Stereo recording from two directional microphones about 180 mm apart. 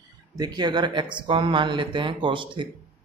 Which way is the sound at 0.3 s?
20° right (ahead or behind).